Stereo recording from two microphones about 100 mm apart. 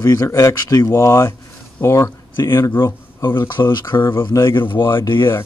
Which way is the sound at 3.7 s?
50° left (ahead or behind).